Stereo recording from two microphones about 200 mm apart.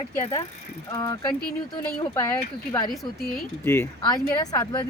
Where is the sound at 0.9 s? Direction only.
20° left (ahead or behind).